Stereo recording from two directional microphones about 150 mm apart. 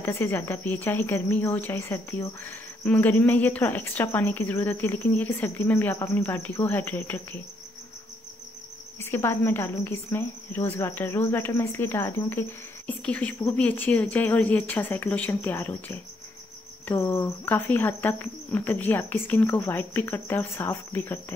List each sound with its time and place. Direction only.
0.0 s speech: 15° left (ahead or behind)
9.0 s speech: 15° left (ahead or behind)